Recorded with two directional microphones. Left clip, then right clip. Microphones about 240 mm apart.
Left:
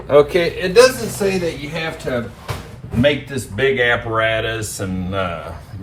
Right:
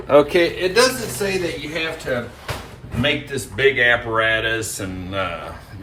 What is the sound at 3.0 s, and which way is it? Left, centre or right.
Speech, centre.